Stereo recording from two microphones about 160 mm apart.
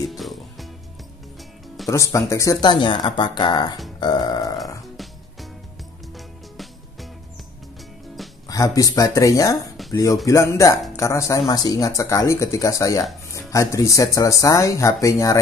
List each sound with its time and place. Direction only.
0.1 s music: centre (ahead or behind)
1.9 s speech: 20° left (ahead or behind)
4.9 s music: centre (ahead or behind)
8.5 s speech: 20° left (ahead or behind)
9.8 s a sound: centre (ahead or behind)
10.2 s speech: 20° left (ahead or behind)